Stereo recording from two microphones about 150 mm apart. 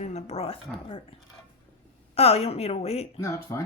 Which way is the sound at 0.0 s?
45° left (ahead or behind).